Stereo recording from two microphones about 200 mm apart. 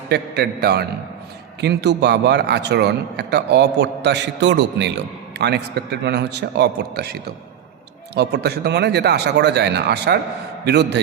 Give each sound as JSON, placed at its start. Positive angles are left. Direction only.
{"t": 0.1, "sound": "a man's voice", "side_deg": -55}